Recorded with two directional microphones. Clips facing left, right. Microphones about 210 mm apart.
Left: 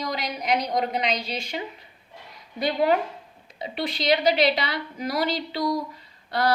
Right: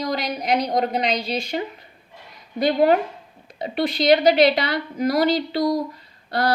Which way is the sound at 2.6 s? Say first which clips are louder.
Right 5 dB; 45° right (ahead or behind).